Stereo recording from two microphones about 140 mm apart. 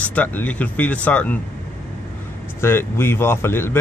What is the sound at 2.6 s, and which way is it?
Speech, 15° left (ahead or behind).